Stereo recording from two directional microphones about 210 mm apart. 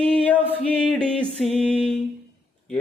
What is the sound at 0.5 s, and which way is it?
Music, 5° left (ahead or behind).